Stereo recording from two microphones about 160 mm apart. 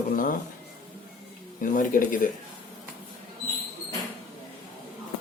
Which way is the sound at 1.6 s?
55° left (ahead or behind).